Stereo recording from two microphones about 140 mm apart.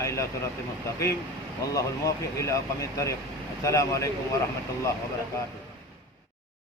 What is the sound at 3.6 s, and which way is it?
Speech, 20° left (ahead or behind).